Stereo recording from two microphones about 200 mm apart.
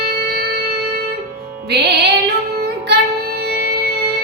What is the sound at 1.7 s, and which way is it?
Music, 55° right (ahead or behind).